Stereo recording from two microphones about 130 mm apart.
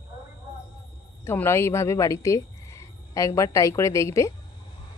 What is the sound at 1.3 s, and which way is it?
A woman's voice, 20° left (ahead or behind).